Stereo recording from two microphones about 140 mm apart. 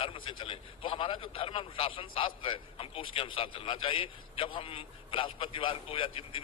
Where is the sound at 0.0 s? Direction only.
40° left (ahead or behind).